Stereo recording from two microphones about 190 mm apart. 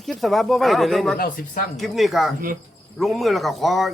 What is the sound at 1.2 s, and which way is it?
Speech, 45° left (ahead or behind).